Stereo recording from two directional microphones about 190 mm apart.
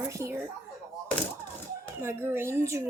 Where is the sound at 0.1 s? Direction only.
15° right (ahead or behind).